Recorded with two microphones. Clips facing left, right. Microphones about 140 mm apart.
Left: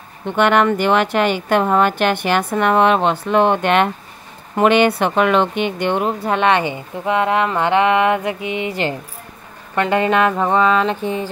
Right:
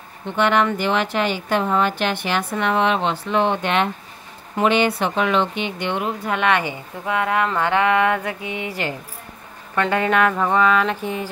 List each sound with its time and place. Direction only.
0.3 s speech: 60° left (ahead or behind); by 11.2 s 25° left (ahead or behind)